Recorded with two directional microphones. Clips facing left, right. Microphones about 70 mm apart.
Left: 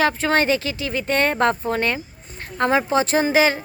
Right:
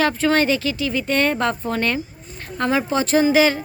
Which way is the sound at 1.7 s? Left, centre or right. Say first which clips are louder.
Even; left.